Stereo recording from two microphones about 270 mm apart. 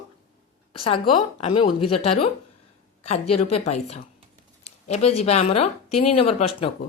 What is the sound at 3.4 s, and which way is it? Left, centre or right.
Speech, left.